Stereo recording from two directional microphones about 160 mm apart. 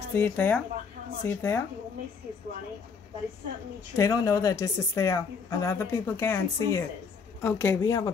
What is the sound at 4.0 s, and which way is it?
Speech, 20° left (ahead or behind).